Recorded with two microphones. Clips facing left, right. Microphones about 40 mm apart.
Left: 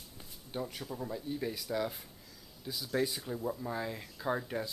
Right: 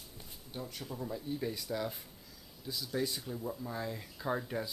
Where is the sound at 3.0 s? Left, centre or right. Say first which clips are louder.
Left 3 dB; centre.